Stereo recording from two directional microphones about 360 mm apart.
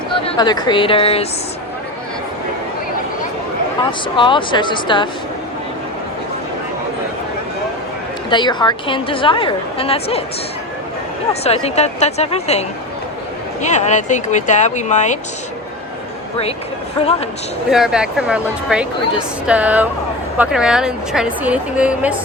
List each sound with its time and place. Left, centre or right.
0.3 s a woman's voice: centre
4.2 s a woman's voice: centre
8.3 s a woman's voice: centre
11.4 s a woman's voice: centre
17.7 s a woman's voice: centre